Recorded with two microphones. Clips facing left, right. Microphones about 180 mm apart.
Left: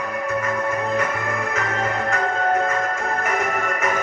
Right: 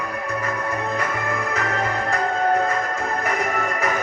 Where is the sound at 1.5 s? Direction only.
35° right (ahead or behind).